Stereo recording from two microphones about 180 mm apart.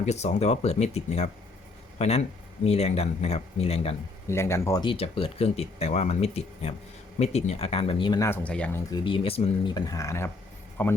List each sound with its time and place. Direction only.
0.0 s speech: 40° left (ahead or behind)
4.3 s speech: 15° left (ahead or behind)
8.3 s speech: 5° left (ahead or behind)
8.9 s speech: 30° left (ahead or behind); by 10.9 s 10° left (ahead or behind)